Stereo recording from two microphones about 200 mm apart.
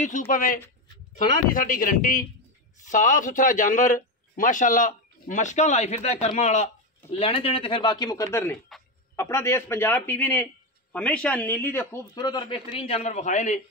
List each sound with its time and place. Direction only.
0.3 s a man's voice: 40° left (ahead or behind)